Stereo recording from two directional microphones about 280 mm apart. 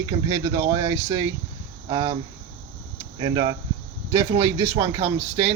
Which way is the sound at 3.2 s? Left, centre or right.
Centre.